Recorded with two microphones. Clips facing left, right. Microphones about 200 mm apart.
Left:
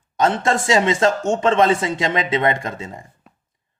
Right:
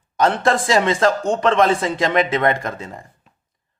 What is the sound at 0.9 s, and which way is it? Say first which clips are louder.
Speech: even; 25° left (ahead or behind).